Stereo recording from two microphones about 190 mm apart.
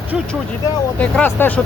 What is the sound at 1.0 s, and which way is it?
Speech, 10° left (ahead or behind).